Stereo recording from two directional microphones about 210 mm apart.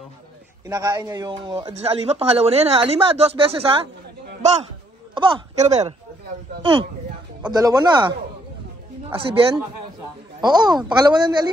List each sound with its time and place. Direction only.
0.7 s a man's voice: 15° right (ahead or behind)
5.1 s a man's voice: 30° right (ahead or behind)
9.1 s a man's voice: 25° right (ahead or behind)
10.4 s a man's voice: 20° right (ahead or behind)